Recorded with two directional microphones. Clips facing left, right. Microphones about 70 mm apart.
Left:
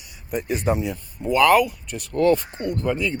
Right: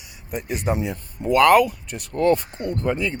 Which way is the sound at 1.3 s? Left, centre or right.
Right.